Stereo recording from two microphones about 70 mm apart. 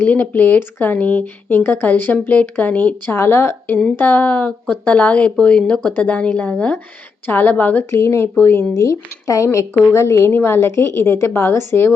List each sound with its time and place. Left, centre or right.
0.0 s a woman's voice: left
7.9 s a woman's voice: left
8.7 s a woman's voice: left